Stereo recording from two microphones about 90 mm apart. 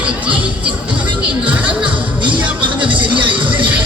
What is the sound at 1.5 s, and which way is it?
Music, 15° right (ahead or behind).